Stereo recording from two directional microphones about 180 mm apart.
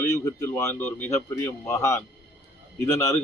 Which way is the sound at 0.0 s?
15° left (ahead or behind).